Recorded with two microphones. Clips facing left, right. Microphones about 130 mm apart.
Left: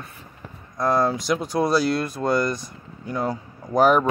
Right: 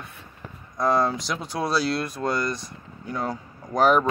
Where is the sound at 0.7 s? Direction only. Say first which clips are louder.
Left 1 dB; 5° left (ahead or behind).